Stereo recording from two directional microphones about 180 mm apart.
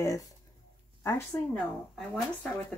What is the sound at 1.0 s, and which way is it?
Speech, 10° left (ahead or behind).